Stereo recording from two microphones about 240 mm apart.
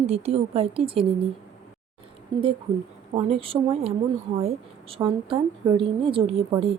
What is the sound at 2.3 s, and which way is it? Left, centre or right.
A woman's voice, centre.